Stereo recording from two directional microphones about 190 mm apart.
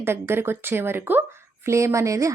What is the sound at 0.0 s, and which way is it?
A woman's voice, 10° right (ahead or behind).